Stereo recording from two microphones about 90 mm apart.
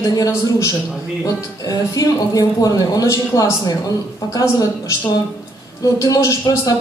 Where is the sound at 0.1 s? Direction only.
40° left (ahead or behind).